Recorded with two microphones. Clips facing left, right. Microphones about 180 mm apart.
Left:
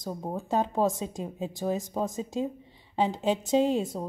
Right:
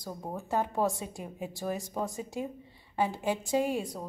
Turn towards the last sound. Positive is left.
turn(degrees=25)  # may be behind; listen again after turning